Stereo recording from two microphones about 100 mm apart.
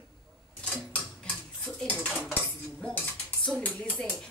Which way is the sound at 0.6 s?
15° left (ahead or behind).